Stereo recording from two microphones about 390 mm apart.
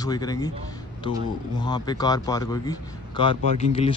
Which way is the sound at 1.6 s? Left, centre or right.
Centre.